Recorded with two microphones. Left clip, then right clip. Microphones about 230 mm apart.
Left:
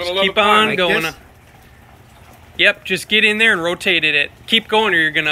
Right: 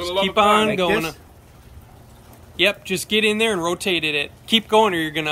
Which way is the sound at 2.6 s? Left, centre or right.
Centre.